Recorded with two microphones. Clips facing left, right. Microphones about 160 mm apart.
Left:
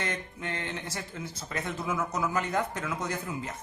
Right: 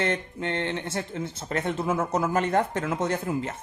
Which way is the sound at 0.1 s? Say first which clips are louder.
Right 7 dB; 30° right (ahead or behind).